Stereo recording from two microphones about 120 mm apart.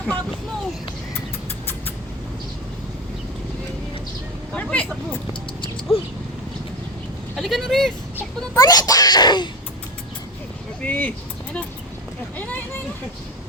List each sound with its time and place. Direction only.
4.5 s vehicle: 10° left (ahead or behind)
7.3 s vehicle: centre (ahead or behind)
8.5 s speech: 35° left (ahead or behind)
10.8 s speech: 10° left (ahead or behind)